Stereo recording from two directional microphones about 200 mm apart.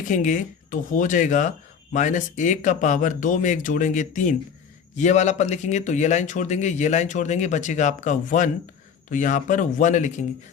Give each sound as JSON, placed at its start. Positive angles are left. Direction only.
{"t": 0.0, "sound": "speech", "side_deg": 40}